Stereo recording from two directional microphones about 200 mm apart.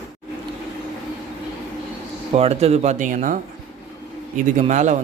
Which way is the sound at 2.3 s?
30° right (ahead or behind).